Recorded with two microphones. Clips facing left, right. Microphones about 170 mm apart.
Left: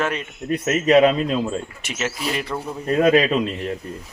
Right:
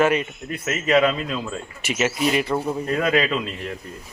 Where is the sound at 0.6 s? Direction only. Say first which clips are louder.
Left 4 dB; 35° left (ahead or behind).